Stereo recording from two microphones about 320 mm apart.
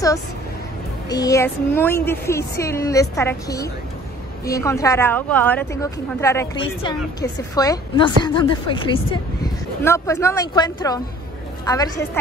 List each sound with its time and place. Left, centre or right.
1.0 s a woman's voice: centre